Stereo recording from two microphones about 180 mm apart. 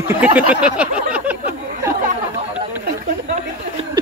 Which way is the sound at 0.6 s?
5° right (ahead or behind).